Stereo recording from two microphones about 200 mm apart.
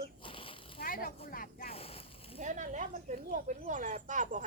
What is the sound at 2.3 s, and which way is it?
Speech, 40° right (ahead or behind).